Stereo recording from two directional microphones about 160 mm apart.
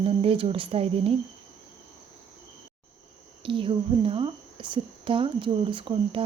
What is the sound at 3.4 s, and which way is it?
A woman's voice, 35° right (ahead or behind).